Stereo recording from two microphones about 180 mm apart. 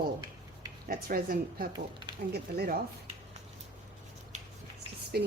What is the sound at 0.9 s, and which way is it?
Speech, 55° right (ahead or behind).